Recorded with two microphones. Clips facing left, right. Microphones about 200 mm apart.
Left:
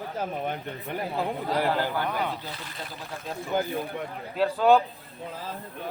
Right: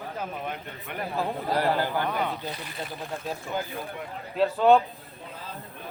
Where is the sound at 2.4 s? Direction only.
15° right (ahead or behind).